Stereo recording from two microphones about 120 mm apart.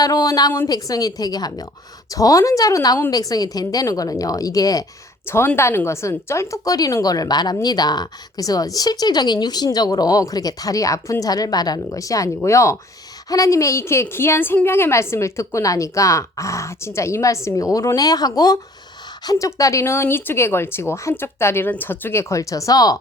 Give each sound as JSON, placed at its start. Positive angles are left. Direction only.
{"t": 0.0, "sound": "a woman's voice", "side_deg": 30}